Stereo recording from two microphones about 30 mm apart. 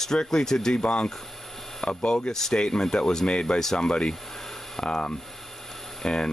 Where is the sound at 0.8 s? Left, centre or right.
Left.